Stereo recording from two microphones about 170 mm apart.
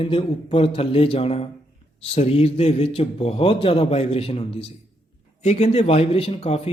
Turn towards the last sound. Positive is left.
turn(degrees=35)  # may be behind; listen again after turning